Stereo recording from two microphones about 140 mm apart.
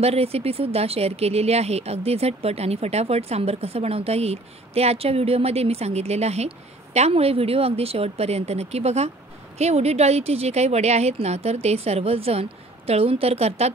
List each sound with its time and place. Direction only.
0.0 s speech: 45° right (ahead or behind)